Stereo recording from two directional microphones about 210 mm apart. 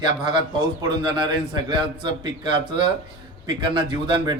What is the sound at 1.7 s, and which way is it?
A man's voice, 20° right (ahead or behind).